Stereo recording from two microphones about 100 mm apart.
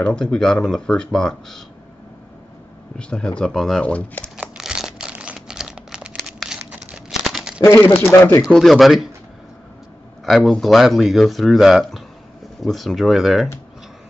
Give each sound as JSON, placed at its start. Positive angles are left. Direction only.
{"t": 0.0, "sound": "speech", "side_deg": 10}
{"t": 3.0, "sound": "speech", "side_deg": 10}
{"t": 4.4, "sound": "a sound", "side_deg": -5}
{"t": 7.6, "sound": "speech", "side_deg": 30}
{"t": 8.5, "sound": "speech", "side_deg": 0}
{"t": 10.2, "sound": "speech", "side_deg": 0}